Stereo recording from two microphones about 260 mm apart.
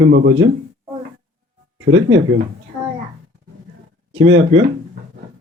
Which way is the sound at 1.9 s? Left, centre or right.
Right.